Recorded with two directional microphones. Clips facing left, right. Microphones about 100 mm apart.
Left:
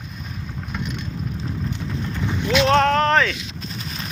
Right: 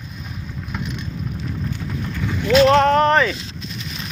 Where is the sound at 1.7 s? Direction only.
20° left (ahead or behind).